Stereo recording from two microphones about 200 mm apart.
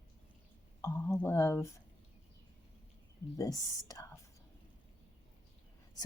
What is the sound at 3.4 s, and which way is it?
Speech, 15° left (ahead or behind).